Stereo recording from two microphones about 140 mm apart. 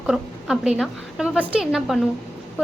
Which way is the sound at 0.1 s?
5° right (ahead or behind).